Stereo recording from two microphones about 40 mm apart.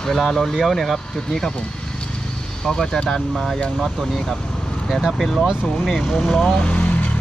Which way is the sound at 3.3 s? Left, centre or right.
Centre.